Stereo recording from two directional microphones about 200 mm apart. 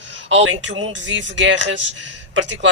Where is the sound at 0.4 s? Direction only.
75° right (ahead or behind).